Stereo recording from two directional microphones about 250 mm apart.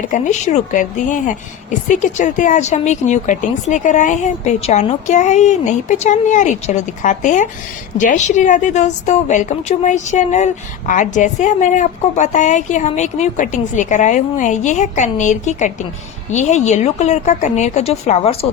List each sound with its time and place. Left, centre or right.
0.1 s a woman's voice: left